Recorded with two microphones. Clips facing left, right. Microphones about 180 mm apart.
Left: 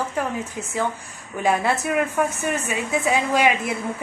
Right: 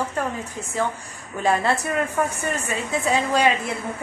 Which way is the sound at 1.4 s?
15° left (ahead or behind).